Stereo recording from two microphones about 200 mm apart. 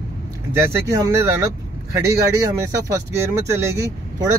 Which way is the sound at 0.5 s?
10° right (ahead or behind).